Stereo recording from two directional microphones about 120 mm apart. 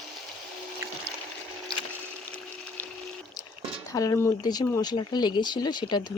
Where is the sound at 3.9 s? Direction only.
30° left (ahead or behind).